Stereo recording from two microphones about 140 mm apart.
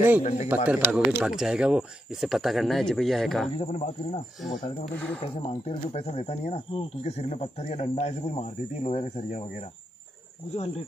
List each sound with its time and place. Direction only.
0.2 s speech: 55° left (ahead or behind)
0.7 s speech: 10° right (ahead or behind)
3.5 s speech: 50° left (ahead or behind)
4.9 s speech: 10° left (ahead or behind)
5.4 s speech: 55° left (ahead or behind)